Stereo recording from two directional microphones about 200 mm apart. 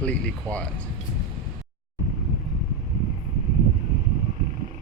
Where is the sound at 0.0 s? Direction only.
5° left (ahead or behind).